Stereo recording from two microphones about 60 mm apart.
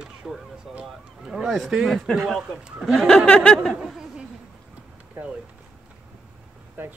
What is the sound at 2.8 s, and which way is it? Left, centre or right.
Speech, centre.